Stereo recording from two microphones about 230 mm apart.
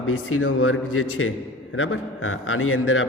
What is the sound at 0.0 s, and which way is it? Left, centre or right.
A man's voice, left.